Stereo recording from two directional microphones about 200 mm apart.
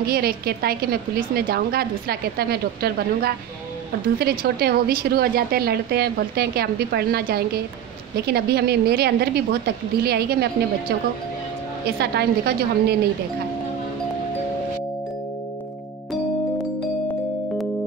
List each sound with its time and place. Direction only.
0.0 s a woman's voice: 50° right (ahead or behind)